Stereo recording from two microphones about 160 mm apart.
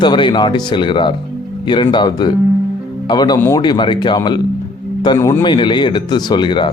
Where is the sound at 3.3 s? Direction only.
15° left (ahead or behind).